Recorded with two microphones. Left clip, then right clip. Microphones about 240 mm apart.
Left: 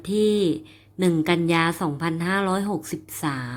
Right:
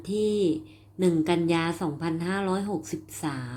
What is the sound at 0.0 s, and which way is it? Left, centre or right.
Speech, left.